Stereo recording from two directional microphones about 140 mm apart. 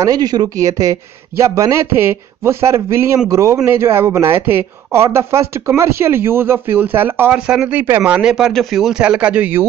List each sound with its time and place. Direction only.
0.0 s speech: 25° right (ahead or behind)